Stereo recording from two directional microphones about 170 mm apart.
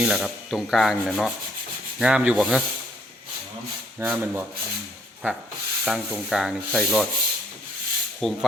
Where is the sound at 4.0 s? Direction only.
15° right (ahead or behind).